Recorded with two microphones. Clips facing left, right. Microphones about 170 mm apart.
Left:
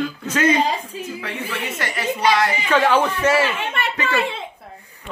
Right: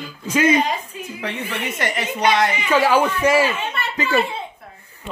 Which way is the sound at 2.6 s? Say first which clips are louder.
Right 1 dB; 10° right (ahead or behind).